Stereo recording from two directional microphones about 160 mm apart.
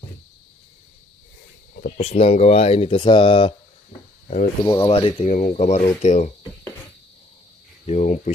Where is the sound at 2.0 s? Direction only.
40° left (ahead or behind).